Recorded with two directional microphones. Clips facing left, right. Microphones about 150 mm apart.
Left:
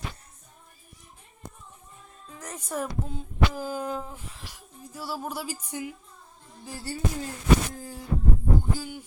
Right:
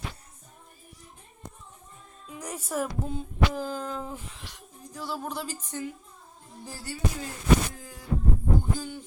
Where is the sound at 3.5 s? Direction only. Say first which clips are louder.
Left 1 dB; 10° left (ahead or behind).